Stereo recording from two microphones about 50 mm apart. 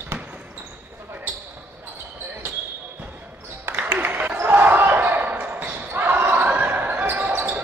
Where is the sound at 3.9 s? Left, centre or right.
Right.